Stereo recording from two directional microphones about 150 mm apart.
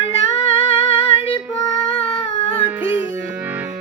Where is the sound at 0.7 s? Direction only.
40° left (ahead or behind).